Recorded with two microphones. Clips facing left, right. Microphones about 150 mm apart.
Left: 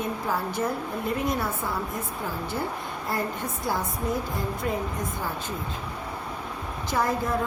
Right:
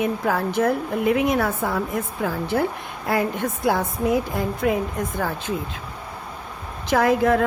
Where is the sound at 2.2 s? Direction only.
85° right.